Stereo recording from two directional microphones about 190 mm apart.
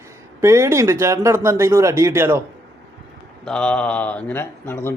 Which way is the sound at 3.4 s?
5° left (ahead or behind).